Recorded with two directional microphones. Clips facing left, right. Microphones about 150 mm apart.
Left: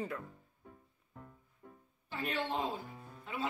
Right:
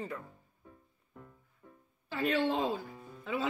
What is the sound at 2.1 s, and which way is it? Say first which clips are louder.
Speech: right 7 dB; 90° right.